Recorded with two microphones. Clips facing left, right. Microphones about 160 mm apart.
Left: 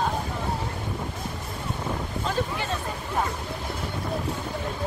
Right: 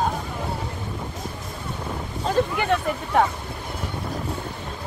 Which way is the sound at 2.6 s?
65° right (ahead or behind).